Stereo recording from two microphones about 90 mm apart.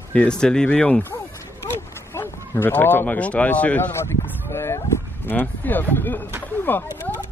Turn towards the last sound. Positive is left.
turn(degrees=25)  # may be behind; listen again after turning